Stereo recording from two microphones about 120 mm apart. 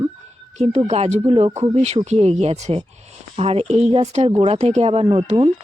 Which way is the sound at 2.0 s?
65° right (ahead or behind).